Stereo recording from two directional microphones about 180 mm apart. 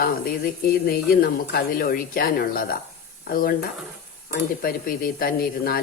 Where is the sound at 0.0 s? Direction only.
55° left (ahead or behind).